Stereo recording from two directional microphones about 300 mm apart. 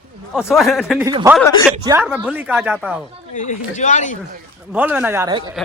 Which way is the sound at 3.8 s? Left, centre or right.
Left.